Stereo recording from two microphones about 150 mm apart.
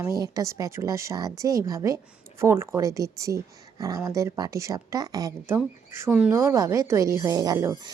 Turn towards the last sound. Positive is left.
turn(degrees=-25)  # may be behind; listen again after turning